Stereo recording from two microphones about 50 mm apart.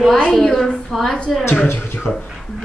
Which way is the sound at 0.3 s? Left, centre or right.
Centre.